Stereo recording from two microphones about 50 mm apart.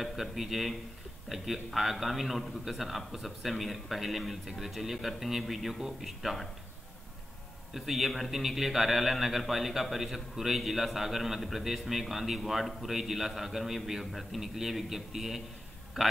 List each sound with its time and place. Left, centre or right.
0.0 s a man's voice: centre
7.7 s a man's voice: centre